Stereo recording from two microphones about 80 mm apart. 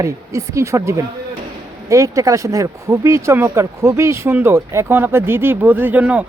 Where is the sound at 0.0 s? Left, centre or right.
Right.